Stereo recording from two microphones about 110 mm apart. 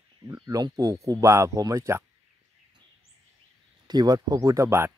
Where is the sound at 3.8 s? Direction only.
40° right (ahead or behind).